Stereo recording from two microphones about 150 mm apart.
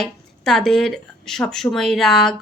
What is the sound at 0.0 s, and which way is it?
A woman's voice, 5° left (ahead or behind).